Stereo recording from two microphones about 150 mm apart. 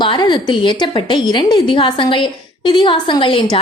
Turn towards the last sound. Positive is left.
turn(degrees=35)  # may be behind; listen again after turning